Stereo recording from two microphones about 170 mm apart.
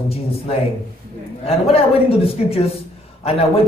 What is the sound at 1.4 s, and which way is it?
A man's voice, 35° left (ahead or behind).